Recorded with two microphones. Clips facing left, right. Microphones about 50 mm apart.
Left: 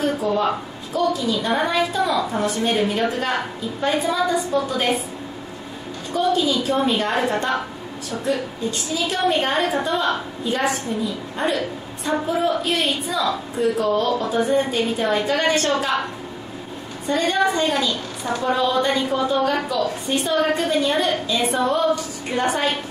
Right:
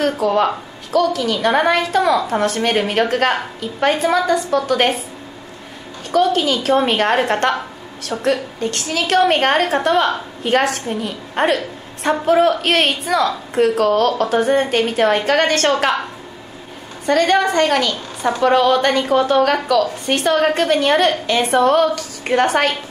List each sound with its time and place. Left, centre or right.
0.0 s a woman's voice: right
6.1 s a woman's voice: right
17.0 s a woman's voice: right